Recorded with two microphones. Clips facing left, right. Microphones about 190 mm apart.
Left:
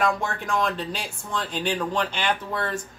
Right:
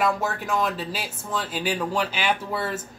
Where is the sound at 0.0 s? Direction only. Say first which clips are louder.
Right 1 dB; 5° right (ahead or behind).